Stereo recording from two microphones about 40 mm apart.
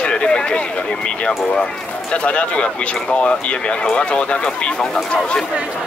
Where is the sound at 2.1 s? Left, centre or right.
Left.